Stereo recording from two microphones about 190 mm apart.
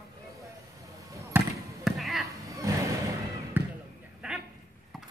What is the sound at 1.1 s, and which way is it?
Basketball bounce, 15° right (ahead or behind).